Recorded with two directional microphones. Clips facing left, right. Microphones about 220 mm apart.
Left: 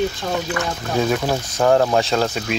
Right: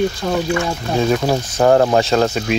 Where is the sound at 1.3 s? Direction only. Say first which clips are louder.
Right 3 dB; 15° right (ahead or behind).